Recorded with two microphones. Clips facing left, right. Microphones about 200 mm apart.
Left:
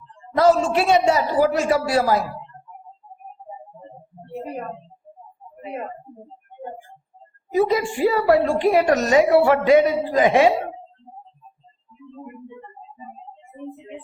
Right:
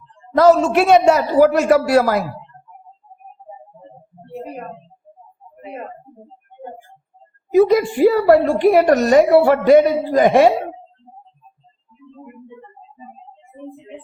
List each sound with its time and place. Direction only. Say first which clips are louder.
0.4 s a man's voice: right 4 dB; 65° right (ahead or behind)
7.5 s a woman's voice: right 6 dB; 70° right (ahead or behind); by 10.5 s 50° right (ahead or behind)